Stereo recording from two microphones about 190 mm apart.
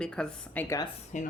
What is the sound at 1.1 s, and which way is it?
Speech, 40° left (ahead or behind).